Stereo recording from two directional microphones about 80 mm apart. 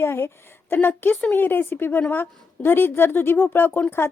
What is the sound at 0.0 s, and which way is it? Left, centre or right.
A woman's voice, left.